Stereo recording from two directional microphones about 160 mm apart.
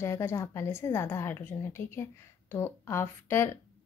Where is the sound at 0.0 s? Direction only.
15° left (ahead or behind).